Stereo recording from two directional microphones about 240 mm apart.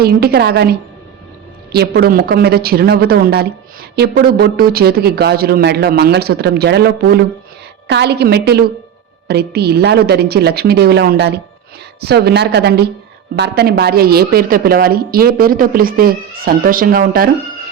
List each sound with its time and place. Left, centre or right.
0.0 s a woman's voice: right